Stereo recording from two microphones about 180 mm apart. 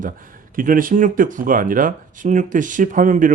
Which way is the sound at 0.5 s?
50° right (ahead or behind).